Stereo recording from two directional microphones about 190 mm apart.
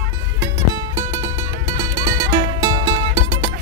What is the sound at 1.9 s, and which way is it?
Music, 20° right (ahead or behind).